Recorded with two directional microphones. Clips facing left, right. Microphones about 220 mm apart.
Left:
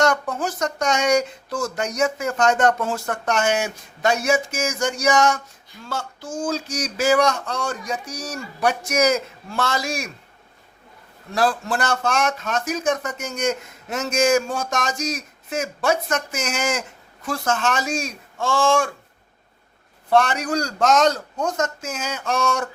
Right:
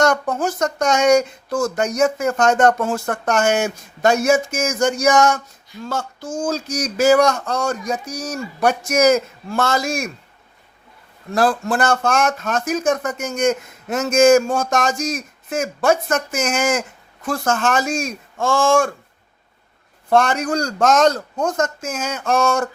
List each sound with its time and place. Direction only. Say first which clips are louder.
0.0 s speech: right 3 dB; 45° right (ahead or behind)
11.3 s speech: right 4 dB; 50° right (ahead or behind)
20.1 s speech: right 2 dB; 45° right (ahead or behind)